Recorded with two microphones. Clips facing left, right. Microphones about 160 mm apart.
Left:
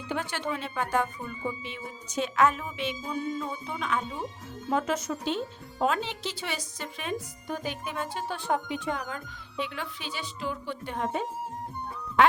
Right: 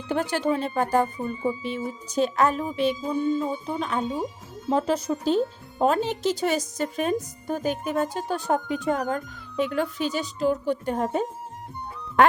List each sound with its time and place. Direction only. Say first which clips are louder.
0.1 s speech: right 8 dB; 40° right (ahead or behind)